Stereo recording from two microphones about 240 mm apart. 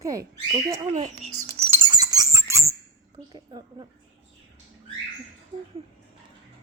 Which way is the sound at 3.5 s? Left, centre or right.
Centre.